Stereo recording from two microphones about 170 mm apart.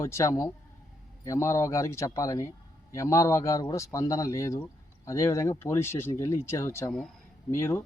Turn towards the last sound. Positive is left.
turn(degrees=15)  # may be behind; listen again after turning